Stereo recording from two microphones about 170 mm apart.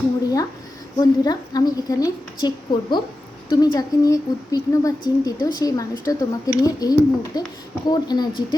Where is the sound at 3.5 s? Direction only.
25° left (ahead or behind).